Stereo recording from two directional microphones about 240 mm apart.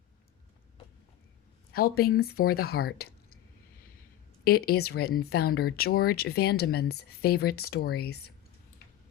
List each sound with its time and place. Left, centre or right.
1.7 s speech: left
4.4 s speech: left